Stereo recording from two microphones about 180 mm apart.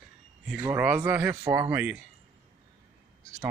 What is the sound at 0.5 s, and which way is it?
Speech, 10° right (ahead or behind).